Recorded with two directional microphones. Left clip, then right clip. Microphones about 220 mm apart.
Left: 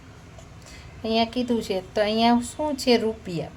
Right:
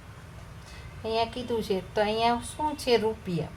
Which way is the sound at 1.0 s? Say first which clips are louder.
Left 5 dB; 30° left (ahead or behind).